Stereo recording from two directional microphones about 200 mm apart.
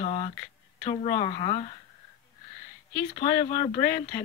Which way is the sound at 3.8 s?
20° left (ahead or behind).